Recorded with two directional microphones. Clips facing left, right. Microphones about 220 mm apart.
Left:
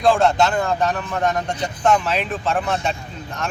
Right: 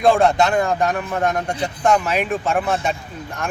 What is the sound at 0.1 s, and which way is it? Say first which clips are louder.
Speech: even; 10° right (ahead or behind).